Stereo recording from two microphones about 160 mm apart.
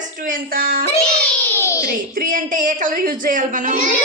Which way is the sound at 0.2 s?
60° right (ahead or behind).